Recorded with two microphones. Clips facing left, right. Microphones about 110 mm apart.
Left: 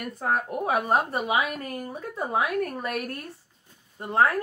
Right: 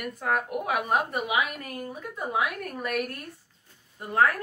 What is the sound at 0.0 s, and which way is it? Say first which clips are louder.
Speech: left 1 dB; 35° left (ahead or behind).